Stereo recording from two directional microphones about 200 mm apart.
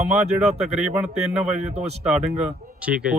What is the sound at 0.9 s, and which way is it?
Speech, 10° right (ahead or behind).